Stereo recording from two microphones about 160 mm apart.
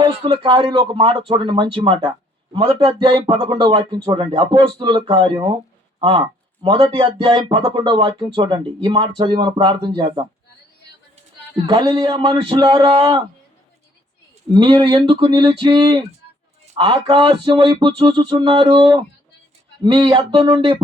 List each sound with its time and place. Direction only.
0.0 s speech: 30° right (ahead or behind)
11.5 s speech: 30° right (ahead or behind)
14.5 s speech: 30° right (ahead or behind)